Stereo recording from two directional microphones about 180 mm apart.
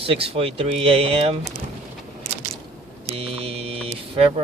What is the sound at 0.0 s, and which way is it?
Speech, 30° right (ahead or behind).